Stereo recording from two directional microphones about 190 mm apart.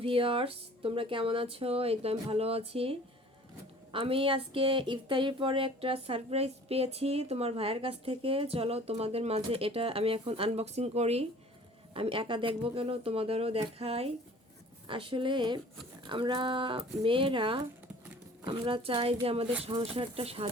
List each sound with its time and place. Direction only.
0.0 s speech: 30° right (ahead or behind)